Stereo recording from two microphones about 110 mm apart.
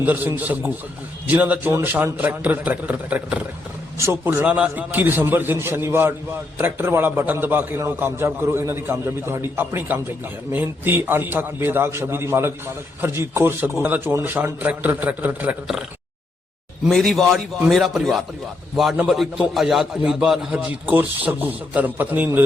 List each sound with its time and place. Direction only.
0.0 s a man's voice: 15° right (ahead or behind)
3.9 s a man's voice: 25° right (ahead or behind)
16.9 s a man's voice: 5° left (ahead or behind); by 22.4 s 15° right (ahead or behind)